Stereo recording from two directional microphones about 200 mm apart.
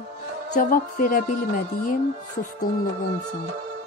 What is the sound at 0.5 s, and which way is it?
Music, 45° left (ahead or behind).